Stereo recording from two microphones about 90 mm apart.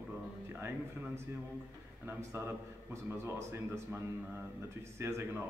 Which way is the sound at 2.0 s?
30° right (ahead or behind).